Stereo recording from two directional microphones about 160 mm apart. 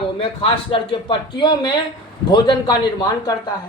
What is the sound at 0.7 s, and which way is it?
Speech, 30° left (ahead or behind).